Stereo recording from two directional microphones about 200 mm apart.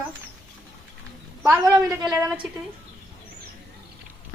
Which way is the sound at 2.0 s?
5° right (ahead or behind).